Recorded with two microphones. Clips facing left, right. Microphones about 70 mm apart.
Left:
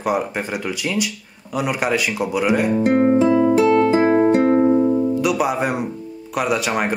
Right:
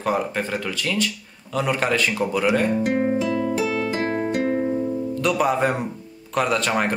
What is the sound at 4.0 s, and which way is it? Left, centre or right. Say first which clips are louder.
Music: left 8 dB; left.